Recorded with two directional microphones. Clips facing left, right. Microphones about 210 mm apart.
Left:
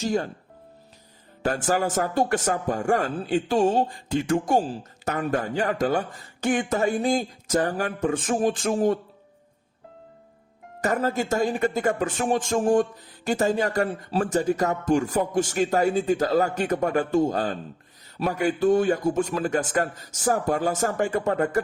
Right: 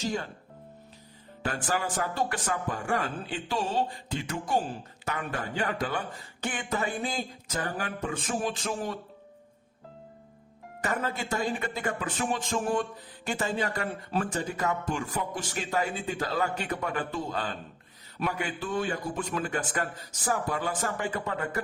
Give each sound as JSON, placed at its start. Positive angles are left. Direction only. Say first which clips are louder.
{"t": 0.0, "sound": "speech", "louder": "left 7 dB", "side_deg": 45}
{"t": 1.4, "sound": "speech", "louder": "left 7 dB", "side_deg": 45}
{"t": 10.8, "sound": "speech", "louder": "left 7 dB", "side_deg": 40}